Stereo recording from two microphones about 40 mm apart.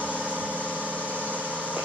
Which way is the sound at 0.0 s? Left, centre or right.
Right.